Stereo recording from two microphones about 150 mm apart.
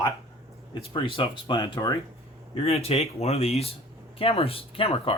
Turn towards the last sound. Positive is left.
turn(degrees=40)  # may be behind; listen again after turning